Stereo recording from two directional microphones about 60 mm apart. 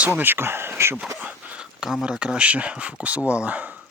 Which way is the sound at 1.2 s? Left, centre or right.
Right.